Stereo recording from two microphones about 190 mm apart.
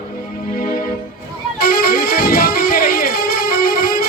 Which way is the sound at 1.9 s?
55° left (ahead or behind).